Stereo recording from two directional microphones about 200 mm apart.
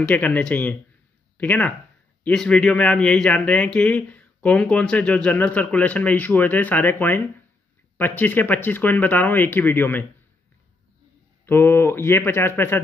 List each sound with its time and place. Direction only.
0.0 s speech: 10° left (ahead or behind)
11.4 s speech: 10° left (ahead or behind)